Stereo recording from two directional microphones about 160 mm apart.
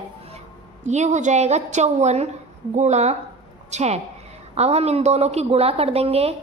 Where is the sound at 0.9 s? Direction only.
45° right (ahead or behind).